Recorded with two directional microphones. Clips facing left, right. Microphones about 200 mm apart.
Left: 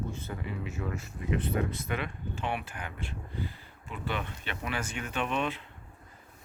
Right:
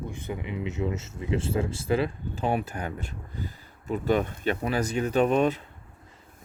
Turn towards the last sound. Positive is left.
turn(degrees=-40)  # may be behind; listen again after turning